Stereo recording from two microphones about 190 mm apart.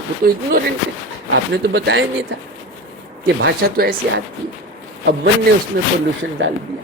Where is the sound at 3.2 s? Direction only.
55° right (ahead or behind).